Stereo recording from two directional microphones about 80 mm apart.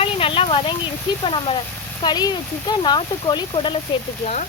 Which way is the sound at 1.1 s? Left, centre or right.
Left.